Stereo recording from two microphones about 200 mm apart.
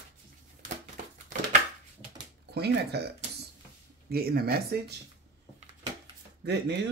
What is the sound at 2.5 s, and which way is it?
Speech, 55° right (ahead or behind).